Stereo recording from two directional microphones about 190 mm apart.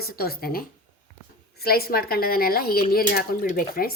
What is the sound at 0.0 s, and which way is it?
A woman's voice, 55° left (ahead or behind).